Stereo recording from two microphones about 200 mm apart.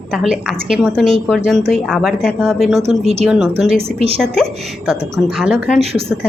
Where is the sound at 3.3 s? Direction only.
Centre (ahead or behind).